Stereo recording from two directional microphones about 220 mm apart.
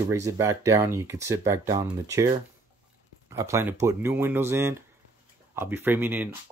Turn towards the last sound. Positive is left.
turn(degrees=-10)  # may be behind; listen again after turning